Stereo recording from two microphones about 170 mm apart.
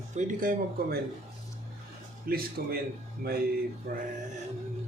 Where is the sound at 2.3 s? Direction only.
60° right (ahead or behind).